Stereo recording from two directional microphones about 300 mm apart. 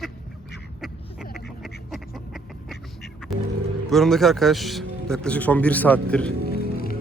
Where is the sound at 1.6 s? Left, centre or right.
Centre.